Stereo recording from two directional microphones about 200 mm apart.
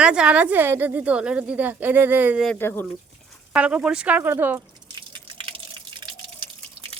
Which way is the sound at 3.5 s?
5° right (ahead or behind).